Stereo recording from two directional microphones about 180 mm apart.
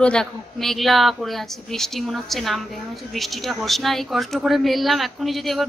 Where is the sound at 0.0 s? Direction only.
5° left (ahead or behind).